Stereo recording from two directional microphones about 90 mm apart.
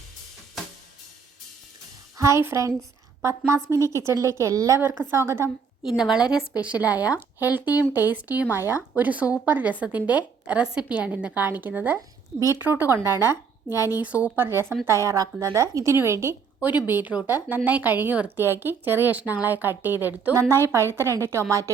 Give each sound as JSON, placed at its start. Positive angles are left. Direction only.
{"t": 2.1, "sound": "a woman's voice", "side_deg": -35}
{"t": 4.8, "sound": "a woman's voice", "side_deg": -25}
{"t": 5.8, "sound": "a woman's voice", "side_deg": -5}
{"t": 14.0, "sound": "a woman's voice", "side_deg": -15}
{"t": 15.0, "sound": "a woman's voice", "side_deg": -40}
{"t": 16.6, "sound": "a woman's voice", "side_deg": -20}
{"t": 20.3, "sound": "a woman's voice", "side_deg": -35}